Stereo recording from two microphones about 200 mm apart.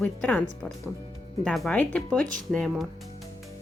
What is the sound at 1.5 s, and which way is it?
Speech, 5° left (ahead or behind).